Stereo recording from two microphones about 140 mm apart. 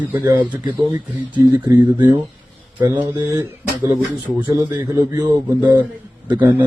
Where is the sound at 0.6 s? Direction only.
35° right (ahead or behind).